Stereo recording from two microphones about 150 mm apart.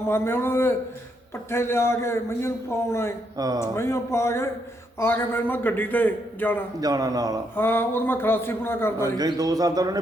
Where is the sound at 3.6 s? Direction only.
20° left (ahead or behind).